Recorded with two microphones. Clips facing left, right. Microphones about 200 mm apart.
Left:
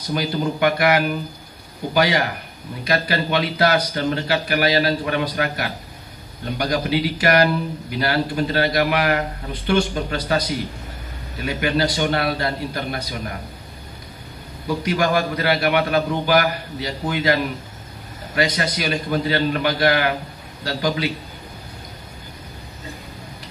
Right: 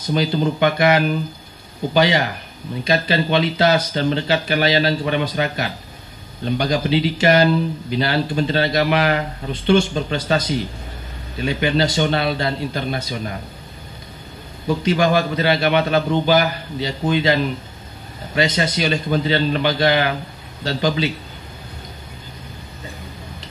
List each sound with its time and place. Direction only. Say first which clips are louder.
0.0 s speech: right 3 dB; 25° right (ahead or behind)
14.7 s speech: right 3 dB; 25° right (ahead or behind)